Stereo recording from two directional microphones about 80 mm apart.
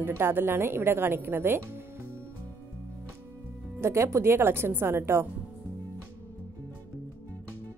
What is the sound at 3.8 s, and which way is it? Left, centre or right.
Speech, right.